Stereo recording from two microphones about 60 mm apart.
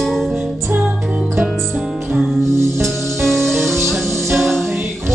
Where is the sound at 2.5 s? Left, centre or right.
Right.